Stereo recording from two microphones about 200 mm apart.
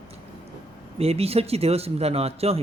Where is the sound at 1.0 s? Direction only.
30° right (ahead or behind).